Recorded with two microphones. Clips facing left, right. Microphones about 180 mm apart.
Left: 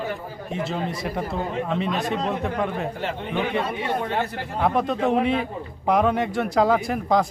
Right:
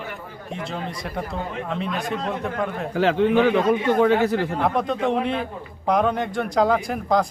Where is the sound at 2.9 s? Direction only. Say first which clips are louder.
Right 9 dB; 90° right.